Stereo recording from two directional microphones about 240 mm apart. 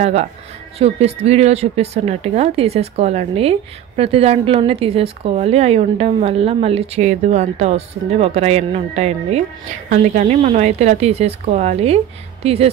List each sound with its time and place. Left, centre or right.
0.0 s speech: right